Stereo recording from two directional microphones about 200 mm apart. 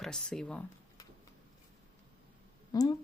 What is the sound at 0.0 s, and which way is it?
Speech, 5° left (ahead or behind).